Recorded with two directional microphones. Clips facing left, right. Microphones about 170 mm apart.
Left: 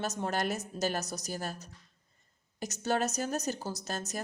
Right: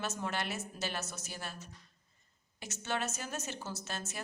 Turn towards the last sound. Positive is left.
turn(degrees=40)  # may be behind; listen again after turning